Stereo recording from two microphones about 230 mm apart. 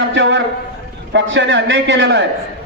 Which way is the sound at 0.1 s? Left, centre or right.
Right.